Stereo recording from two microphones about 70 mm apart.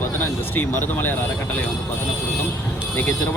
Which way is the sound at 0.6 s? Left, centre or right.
Left.